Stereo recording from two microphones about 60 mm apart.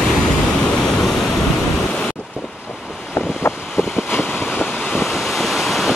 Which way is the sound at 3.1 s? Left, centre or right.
Left.